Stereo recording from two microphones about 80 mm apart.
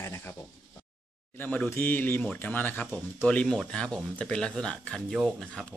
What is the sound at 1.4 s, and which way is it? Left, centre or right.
Speech, left.